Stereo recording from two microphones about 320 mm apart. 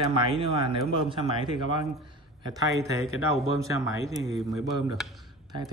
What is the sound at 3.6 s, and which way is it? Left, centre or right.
Speech, centre.